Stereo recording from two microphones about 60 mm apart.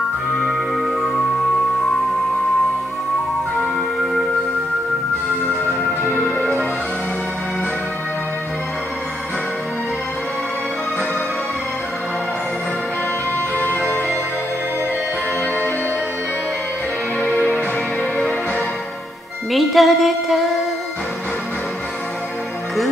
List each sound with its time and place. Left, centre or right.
0.5 s music: centre
13.6 s music: left
19.5 s music: centre